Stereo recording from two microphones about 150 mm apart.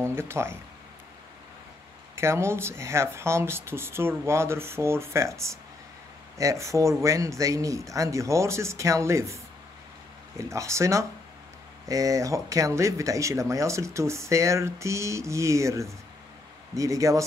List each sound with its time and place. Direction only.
0.0 s speech: 15° right (ahead or behind)
2.1 s speech: 20° right (ahead or behind)